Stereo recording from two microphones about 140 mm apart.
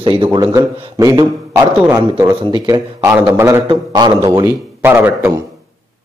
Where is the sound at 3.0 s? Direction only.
20° right (ahead or behind).